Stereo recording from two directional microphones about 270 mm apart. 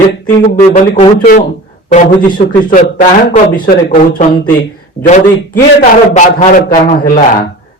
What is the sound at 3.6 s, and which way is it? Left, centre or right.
Speech, left.